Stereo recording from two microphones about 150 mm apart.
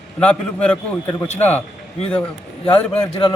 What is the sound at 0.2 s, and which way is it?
Speech, 10° left (ahead or behind).